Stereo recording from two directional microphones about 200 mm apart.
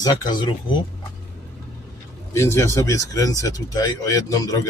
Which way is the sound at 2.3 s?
15° left (ahead or behind).